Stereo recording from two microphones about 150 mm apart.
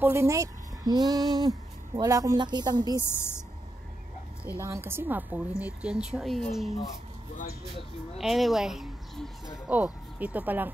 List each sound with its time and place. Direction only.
0.0 s speech: 15° right (ahead or behind)
3.0 s a woman's voice: 15° left (ahead or behind)
4.5 s a woman's voice: 15° right (ahead or behind); by 6.7 s centre (ahead or behind)
7.3 s speech: 90° left
8.2 s a woman's voice: centre (ahead or behind)